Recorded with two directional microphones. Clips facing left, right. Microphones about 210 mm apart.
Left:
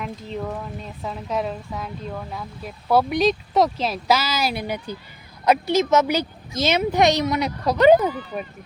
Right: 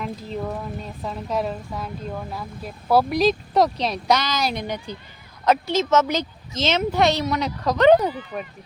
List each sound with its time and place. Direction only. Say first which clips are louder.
0.0 s speech: right 1 dB; centre (ahead or behind)